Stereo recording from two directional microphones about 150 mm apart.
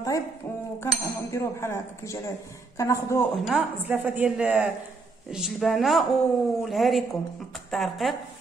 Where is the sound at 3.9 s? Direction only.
10° right (ahead or behind).